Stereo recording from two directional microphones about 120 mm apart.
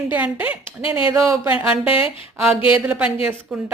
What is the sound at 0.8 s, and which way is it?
Speech, 50° left (ahead or behind).